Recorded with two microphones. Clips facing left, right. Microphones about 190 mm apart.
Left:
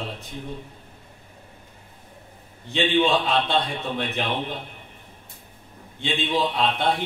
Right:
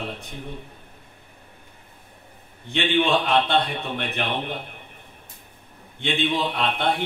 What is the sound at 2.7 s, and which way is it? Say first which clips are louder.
A man's voice: left 1 dB; 60° right (ahead or behind).